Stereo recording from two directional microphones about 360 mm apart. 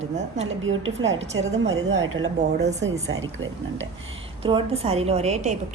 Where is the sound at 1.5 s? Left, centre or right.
Centre.